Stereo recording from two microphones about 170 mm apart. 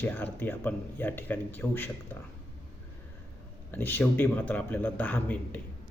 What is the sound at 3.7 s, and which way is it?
A man's voice, 10° left (ahead or behind).